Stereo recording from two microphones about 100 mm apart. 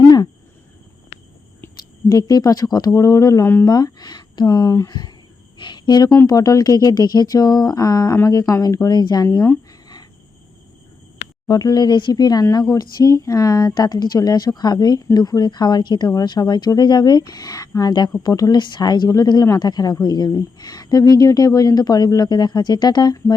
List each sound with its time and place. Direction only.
0.0 s cricket: 40° left (ahead or behind)
1.7 s speech: 40° left (ahead or behind)
3.7 s speech: 40° left (ahead or behind)
11.4 s speech: 40° left (ahead or behind)